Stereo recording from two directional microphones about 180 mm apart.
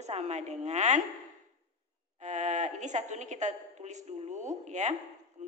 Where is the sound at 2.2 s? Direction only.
40° right (ahead or behind).